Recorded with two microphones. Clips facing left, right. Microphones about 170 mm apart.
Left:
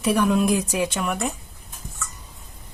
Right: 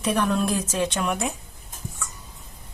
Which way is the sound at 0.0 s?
10° left (ahead or behind).